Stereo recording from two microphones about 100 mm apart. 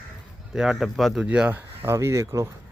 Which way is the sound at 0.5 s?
5° right (ahead or behind).